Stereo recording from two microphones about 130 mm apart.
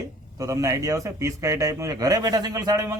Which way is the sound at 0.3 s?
25° right (ahead or behind).